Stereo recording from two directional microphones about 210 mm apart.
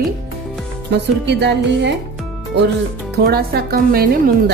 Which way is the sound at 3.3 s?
50° right (ahead or behind).